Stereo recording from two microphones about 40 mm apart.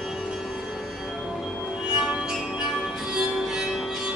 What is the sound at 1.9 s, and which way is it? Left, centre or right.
Music, right.